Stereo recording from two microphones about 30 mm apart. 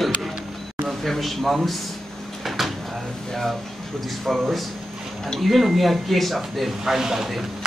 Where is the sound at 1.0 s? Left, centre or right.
Centre.